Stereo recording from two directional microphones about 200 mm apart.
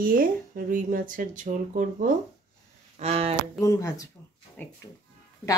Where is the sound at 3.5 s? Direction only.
15° left (ahead or behind).